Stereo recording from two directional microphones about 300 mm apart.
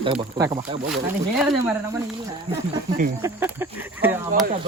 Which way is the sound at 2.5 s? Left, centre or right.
Centre.